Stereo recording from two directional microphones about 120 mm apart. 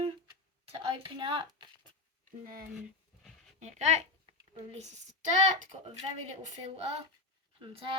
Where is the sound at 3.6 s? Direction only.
70° right (ahead or behind).